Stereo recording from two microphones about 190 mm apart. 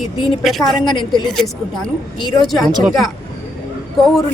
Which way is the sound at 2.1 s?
25° left (ahead or behind).